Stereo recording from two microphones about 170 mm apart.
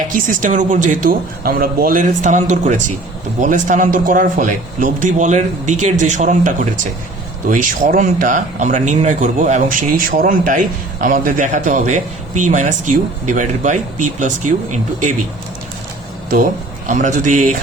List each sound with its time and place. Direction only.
0.1 s a man's voice: 50° right (ahead or behind)
16.9 s a man's voice: 50° right (ahead or behind)